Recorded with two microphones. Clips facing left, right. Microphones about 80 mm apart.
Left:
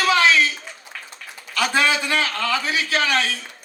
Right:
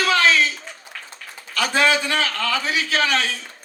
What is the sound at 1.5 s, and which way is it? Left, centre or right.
A man's voice, left.